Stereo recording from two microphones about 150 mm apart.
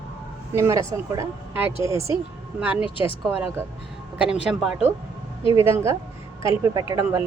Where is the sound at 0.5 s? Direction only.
20° right (ahead or behind).